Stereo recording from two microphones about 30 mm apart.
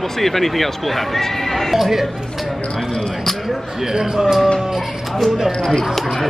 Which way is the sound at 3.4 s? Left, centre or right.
Centre.